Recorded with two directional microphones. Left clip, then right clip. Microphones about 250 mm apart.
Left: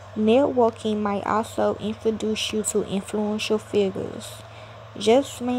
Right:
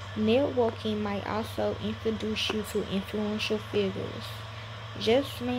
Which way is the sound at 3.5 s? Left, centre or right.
Left.